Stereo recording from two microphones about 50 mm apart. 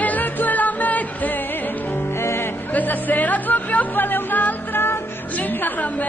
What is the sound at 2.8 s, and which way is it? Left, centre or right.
A woman's voice, left.